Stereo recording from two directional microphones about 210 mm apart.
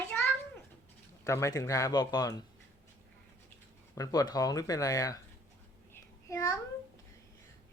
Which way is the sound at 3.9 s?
15° left (ahead or behind).